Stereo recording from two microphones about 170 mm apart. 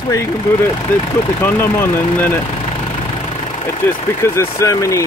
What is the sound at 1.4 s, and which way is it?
Speech, 10° left (ahead or behind).